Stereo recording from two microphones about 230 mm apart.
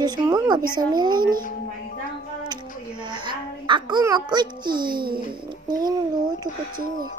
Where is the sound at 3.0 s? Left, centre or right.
Centre.